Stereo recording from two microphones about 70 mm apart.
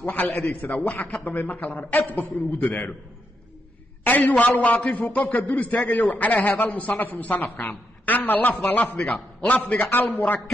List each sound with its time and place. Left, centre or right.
0.0 s a man's voice: left
4.0 s a man's voice: left